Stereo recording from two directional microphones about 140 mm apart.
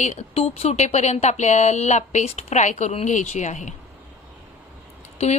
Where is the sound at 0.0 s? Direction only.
50° left (ahead or behind).